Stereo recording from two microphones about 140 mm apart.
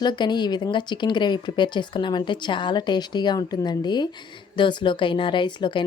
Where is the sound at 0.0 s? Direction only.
30° left (ahead or behind).